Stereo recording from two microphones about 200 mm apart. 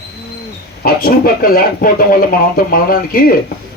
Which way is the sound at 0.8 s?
45° left (ahead or behind).